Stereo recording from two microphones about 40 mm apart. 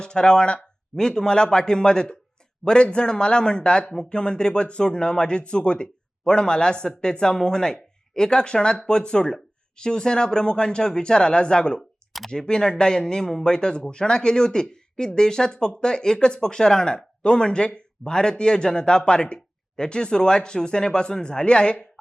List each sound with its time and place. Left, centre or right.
0.0 s speech: left
11.8 s clicking: centre
12.3 s speech: centre